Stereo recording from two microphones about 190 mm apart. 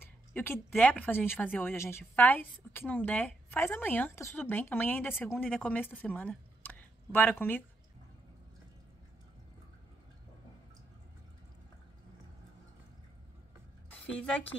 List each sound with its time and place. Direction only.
0.0 s a woman's voice: 10° left (ahead or behind)